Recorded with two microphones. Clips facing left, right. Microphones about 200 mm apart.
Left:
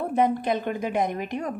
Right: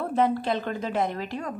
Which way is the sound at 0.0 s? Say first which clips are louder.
Left 1 dB; 15° left (ahead or behind).